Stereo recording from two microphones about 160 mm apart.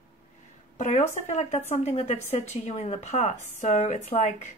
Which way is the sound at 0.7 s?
45° left (ahead or behind).